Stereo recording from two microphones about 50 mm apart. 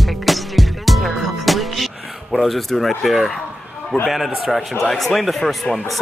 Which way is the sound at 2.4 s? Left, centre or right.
Centre.